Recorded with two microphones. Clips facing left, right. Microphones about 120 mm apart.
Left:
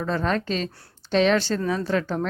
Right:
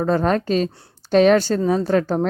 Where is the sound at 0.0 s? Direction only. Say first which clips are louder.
Right 6 dB; 40° right (ahead or behind).